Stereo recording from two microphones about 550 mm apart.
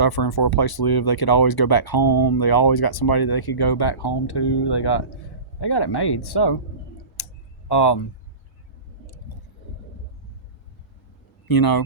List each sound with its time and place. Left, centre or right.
0.0 s speech: left
7.2 s tick-tock: left
7.7 s speech: left
11.4 s speech: left